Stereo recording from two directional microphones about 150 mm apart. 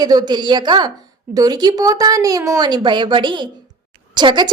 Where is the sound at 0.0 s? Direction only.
25° right (ahead or behind).